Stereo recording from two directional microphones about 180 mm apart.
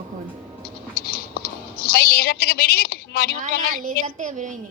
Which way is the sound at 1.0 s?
55° left (ahead or behind).